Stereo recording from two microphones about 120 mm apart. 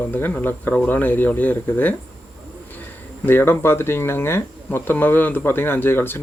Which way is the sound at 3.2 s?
20° left (ahead or behind).